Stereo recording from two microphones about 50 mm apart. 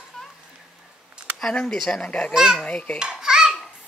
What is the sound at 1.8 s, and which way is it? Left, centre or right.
Speech, centre.